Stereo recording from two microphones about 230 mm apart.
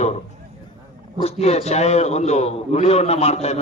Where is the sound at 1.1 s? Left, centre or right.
Left.